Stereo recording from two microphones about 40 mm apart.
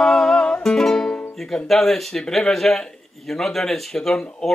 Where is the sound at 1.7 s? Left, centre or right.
Centre.